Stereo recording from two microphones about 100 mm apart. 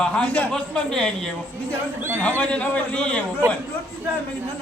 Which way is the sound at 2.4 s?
10° left (ahead or behind).